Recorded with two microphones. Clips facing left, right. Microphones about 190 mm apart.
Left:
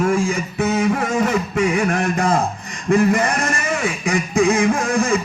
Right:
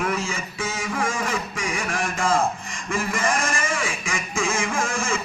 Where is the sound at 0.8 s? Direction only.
40° left (ahead or behind).